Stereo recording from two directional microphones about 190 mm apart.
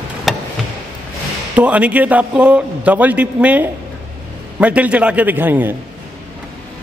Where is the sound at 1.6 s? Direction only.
5° right (ahead or behind).